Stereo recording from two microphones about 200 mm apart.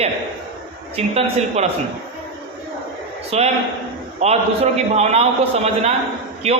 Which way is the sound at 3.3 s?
30° right (ahead or behind).